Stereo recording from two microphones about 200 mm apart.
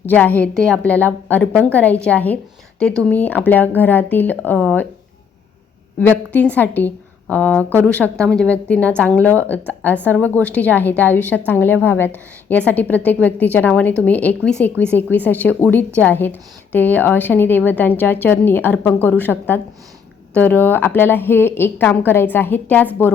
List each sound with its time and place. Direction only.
0.0 s a woman's voice: 10° left (ahead or behind)
6.0 s a woman's voice: 10° left (ahead or behind)